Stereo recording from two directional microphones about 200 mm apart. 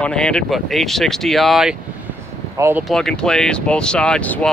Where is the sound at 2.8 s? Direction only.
Centre (ahead or behind).